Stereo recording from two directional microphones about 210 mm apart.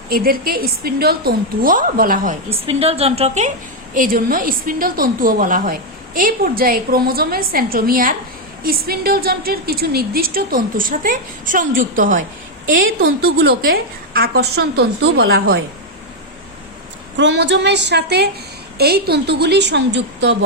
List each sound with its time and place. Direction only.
0.1 s a woman's voice: 45° right (ahead or behind)
2.5 s a woman's voice: 30° right (ahead or behind)
12.6 s speech: 65° right (ahead or behind)
13.1 s a woman's voice: 50° right (ahead or behind)
17.2 s a woman's voice: 60° right (ahead or behind)